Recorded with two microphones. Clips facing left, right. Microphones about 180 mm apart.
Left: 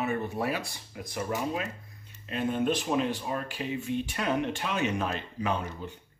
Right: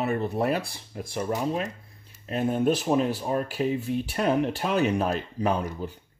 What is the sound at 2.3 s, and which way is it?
Speech, 40° right (ahead or behind).